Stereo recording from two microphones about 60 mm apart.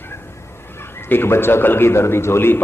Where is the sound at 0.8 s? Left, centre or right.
Left.